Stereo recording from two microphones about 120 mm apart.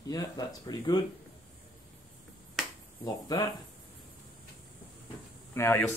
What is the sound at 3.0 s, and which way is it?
Speech, 30° left (ahead or behind).